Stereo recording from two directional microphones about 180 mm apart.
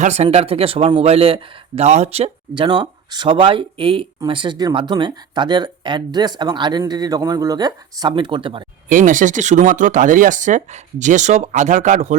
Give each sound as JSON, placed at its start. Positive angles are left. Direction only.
{"t": 0.0, "sound": "speech", "side_deg": -35}
{"t": 8.9, "sound": "speech", "side_deg": -45}